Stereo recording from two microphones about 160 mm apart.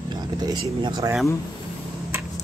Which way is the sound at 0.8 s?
25° right (ahead or behind).